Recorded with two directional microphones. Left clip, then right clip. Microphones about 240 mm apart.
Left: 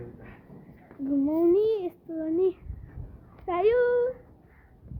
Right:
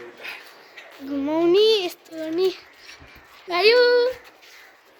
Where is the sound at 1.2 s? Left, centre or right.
Centre.